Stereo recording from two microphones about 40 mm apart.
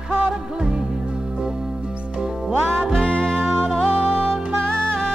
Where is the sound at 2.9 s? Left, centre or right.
Left.